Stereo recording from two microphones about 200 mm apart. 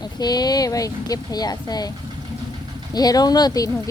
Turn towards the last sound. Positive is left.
turn(degrees=15)  # may be behind; listen again after turning